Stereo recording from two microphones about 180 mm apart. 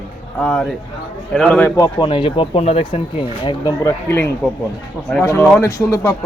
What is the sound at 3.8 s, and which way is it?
Speech, 15° left (ahead or behind).